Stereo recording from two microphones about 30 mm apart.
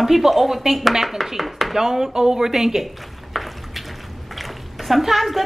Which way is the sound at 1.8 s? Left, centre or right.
Centre.